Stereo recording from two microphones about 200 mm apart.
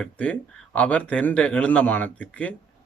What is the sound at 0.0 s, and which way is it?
Speech, 5° left (ahead or behind).